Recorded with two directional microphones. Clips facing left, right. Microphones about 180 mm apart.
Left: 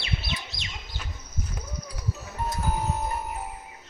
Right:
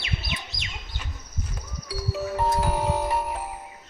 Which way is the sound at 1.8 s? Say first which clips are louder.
Right 8 dB; 90° right.